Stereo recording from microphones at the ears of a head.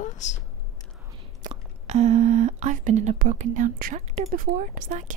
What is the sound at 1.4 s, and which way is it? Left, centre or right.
Speech, right.